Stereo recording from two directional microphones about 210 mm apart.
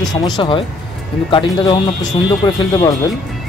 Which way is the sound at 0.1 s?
25° left (ahead or behind).